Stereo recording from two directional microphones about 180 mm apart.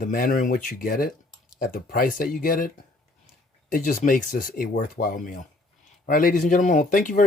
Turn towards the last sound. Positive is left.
turn(degrees=45)  # may be behind; listen again after turning